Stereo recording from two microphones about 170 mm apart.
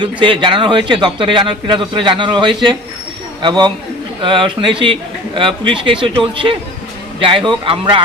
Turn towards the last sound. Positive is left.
turn(degrees=-30)  # may be behind; listen again after turning